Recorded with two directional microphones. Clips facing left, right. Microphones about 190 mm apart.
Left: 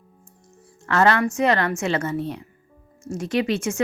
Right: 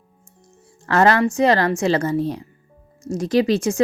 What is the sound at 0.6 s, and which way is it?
A woman's voice, 35° right (ahead or behind).